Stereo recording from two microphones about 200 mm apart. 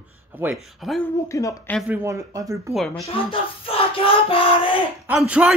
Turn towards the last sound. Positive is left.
turn(degrees=-5)  # may be behind; listen again after turning